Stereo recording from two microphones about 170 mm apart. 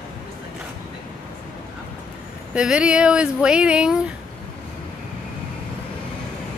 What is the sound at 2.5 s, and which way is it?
Speech, 5° right (ahead or behind).